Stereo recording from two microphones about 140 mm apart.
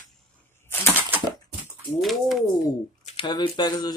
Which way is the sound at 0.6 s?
15° left (ahead or behind).